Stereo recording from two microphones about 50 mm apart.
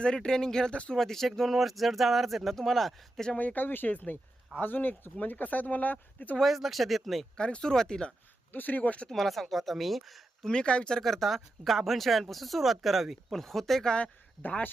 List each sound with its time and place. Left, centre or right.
0.0 s speech: centre
3.3 s speech: left
6.4 s speech: centre
7.3 s speech: centre
8.5 s speech: left
9.0 s speech: centre
10.4 s speech: centre
11.0 s speech: centre